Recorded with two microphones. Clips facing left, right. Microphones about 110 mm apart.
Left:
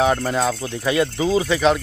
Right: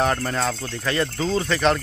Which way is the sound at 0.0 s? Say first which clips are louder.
Left 4 dB; 10° left (ahead or behind).